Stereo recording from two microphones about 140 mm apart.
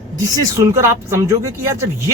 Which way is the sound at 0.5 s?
20° right (ahead or behind).